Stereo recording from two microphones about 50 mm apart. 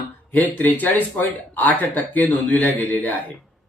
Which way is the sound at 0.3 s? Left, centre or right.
Left.